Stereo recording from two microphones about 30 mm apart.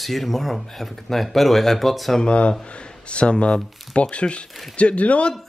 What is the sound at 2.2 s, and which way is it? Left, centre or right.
Speech, left.